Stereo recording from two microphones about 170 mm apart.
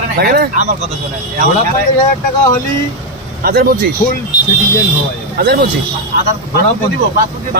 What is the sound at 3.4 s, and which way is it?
Speech, 60° right (ahead or behind).